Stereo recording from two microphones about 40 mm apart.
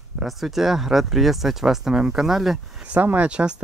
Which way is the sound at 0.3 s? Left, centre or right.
Centre.